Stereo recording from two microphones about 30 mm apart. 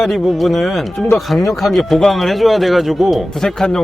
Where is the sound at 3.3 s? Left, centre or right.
Centre.